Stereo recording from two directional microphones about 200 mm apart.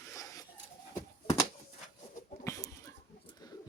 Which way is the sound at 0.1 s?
15° left (ahead or behind).